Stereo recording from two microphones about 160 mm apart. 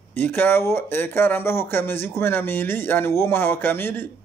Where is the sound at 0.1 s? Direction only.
15° left (ahead or behind).